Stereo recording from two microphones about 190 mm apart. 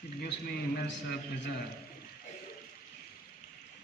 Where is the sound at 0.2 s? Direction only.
55° left (ahead or behind).